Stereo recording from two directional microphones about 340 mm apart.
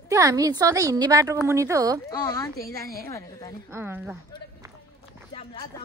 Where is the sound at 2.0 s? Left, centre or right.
Centre.